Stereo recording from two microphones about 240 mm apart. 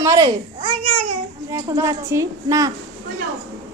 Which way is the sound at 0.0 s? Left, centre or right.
Centre.